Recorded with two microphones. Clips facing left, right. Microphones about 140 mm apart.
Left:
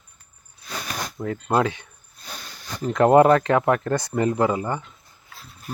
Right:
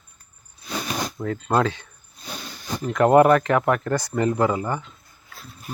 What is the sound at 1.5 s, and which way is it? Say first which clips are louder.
Speech: even; 15° left (ahead or behind).